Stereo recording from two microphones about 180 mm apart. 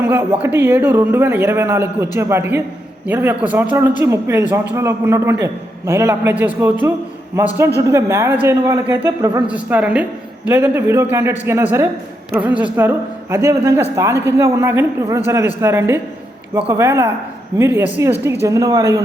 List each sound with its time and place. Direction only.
0.0 s a man's voice: 10° right (ahead or behind)